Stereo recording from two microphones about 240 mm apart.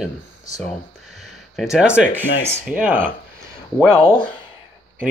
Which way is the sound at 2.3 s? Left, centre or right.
Left.